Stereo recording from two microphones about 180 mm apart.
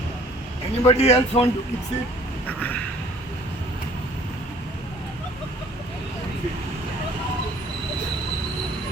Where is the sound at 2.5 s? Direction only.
10° left (ahead or behind).